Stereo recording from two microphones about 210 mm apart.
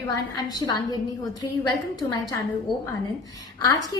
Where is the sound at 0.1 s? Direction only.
20° left (ahead or behind).